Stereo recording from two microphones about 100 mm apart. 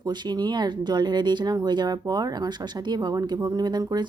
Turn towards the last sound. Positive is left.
turn(degrees=-45)  # may be behind; listen again after turning